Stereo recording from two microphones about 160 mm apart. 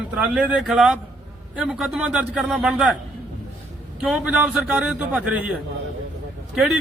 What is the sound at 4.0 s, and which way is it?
A man's voice, 5° right (ahead or behind).